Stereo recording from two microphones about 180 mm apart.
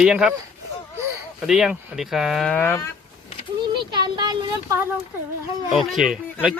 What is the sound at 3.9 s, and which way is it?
Speech, 20° right (ahead or behind).